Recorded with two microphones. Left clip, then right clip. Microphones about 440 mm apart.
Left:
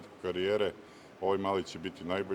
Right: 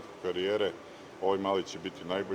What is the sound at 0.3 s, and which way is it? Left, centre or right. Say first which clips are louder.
A man's voice: right 1 dB; left.